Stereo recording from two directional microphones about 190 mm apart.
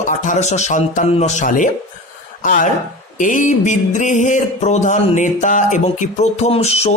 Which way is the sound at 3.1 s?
40° left (ahead or behind).